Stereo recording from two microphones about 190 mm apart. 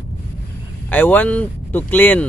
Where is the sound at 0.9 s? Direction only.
10° left (ahead or behind).